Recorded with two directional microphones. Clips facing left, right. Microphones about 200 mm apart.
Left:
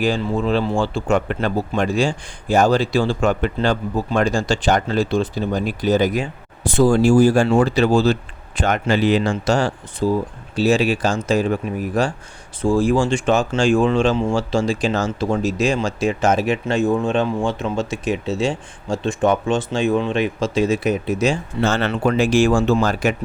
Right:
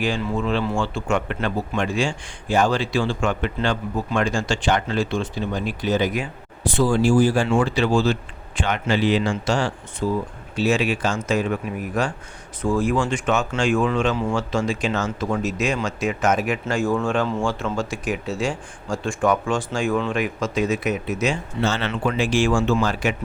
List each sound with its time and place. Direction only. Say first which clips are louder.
0.0 s a man's voice: left 4 dB; 35° left (ahead or behind)
21.6 s a man's voice: left 4 dB; 50° left (ahead or behind)